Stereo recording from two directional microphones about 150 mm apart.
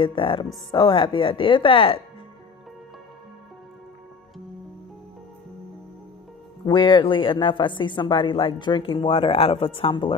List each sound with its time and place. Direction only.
0.0 s speech: 35° left (ahead or behind)
6.6 s speech: 30° left (ahead or behind)